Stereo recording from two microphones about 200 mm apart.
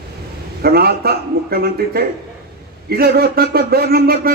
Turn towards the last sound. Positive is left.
turn(degrees=-50)  # may be behind; listen again after turning